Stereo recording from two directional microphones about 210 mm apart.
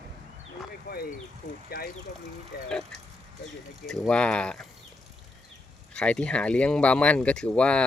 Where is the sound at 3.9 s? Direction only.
5° left (ahead or behind).